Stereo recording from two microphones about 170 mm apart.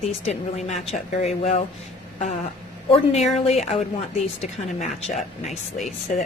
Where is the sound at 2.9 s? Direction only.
40° left (ahead or behind).